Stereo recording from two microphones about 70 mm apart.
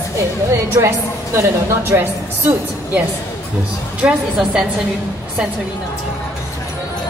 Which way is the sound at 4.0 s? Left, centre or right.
Centre.